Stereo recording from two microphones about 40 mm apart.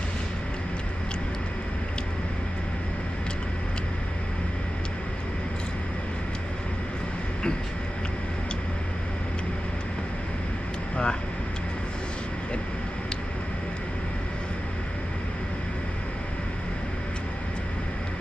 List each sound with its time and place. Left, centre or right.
10.9 s vehicle: left